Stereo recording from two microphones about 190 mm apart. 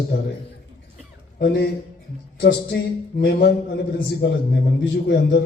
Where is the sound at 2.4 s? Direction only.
60° left (ahead or behind).